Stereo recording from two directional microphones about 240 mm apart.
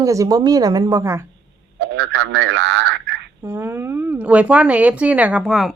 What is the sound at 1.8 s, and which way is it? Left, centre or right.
Telephone, right.